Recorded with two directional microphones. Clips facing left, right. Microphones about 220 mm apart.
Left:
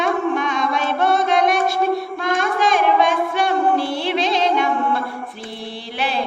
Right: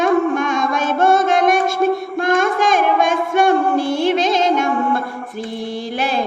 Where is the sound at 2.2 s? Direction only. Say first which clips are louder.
Right 4 dB; 50° right (ahead or behind).